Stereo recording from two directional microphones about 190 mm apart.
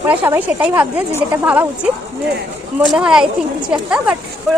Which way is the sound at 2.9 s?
5° right (ahead or behind).